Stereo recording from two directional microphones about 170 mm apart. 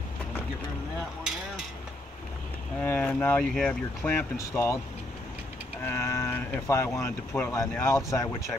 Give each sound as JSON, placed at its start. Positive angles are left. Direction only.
{"t": 2.8, "sound": "speech", "side_deg": 10}
{"t": 5.9, "sound": "speech", "side_deg": 15}